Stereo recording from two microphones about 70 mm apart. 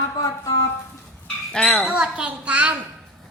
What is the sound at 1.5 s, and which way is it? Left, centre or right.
Speech, centre.